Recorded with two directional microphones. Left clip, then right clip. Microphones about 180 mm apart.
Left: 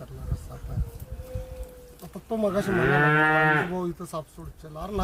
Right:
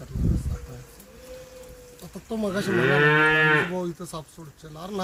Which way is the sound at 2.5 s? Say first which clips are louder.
Right 3 dB; 35° left (ahead or behind).